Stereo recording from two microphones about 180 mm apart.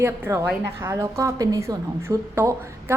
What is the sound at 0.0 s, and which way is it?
A woman's voice, 15° right (ahead or behind).